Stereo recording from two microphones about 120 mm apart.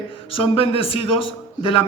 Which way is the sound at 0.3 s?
50° left (ahead or behind).